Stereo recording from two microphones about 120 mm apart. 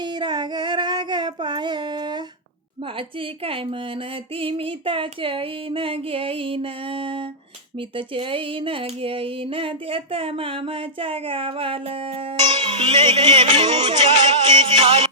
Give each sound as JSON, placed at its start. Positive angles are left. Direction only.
{"t": 0.0, "sound": "child singing", "side_deg": -40}
{"t": 3.2, "sound": "a sound", "side_deg": -50}
{"t": 14.0, "sound": "music", "side_deg": -65}